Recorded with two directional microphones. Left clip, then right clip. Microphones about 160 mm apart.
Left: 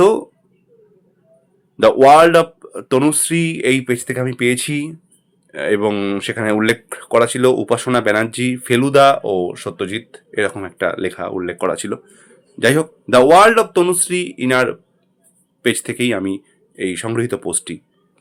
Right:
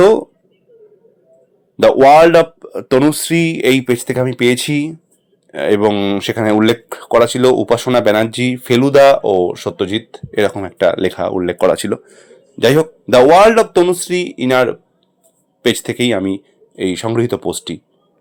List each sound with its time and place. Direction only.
0.0 s speech: 20° right (ahead or behind)
1.7 s speech: 25° right (ahead or behind)